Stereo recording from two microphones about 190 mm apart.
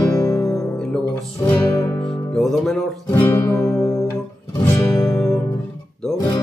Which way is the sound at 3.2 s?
15° left (ahead or behind).